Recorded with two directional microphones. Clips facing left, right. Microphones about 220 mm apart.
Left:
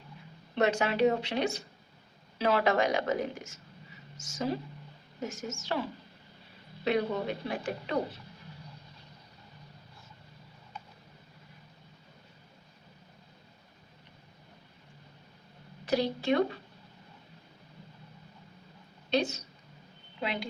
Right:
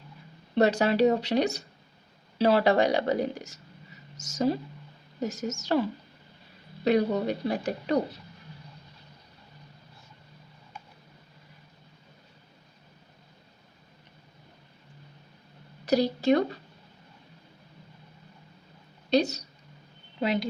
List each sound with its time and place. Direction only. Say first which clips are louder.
0.5 s speech: right 5 dB; 35° right (ahead or behind)
6.8 s speech: right 5 dB; 40° right (ahead or behind)
15.9 s speech: right 5 dB; 40° right (ahead or behind)
19.1 s speech: right 5 dB; 40° right (ahead or behind)